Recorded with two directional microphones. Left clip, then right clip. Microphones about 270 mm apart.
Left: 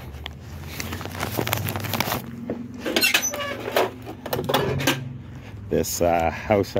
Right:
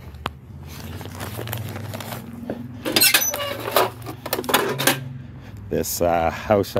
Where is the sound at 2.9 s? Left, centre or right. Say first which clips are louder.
Right 2 dB; right.